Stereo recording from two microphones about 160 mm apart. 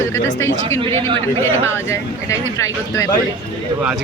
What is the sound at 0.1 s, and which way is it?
Speech, 15° left (ahead or behind).